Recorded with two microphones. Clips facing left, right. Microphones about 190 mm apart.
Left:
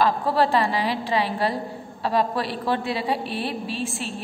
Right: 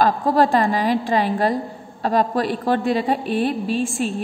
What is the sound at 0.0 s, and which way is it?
A woman's voice, 45° right (ahead or behind).